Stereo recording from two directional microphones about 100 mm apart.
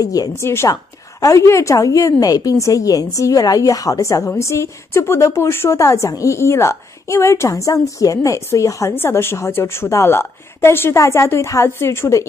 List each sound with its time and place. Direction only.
0.0 s a woman's voice: 35° left (ahead or behind)